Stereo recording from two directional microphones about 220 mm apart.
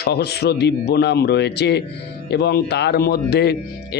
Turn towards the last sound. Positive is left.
turn(degrees=50)  # may be behind; listen again after turning